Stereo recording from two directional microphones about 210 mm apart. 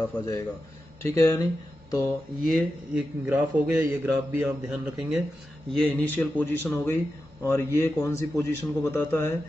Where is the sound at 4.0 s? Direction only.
10° right (ahead or behind).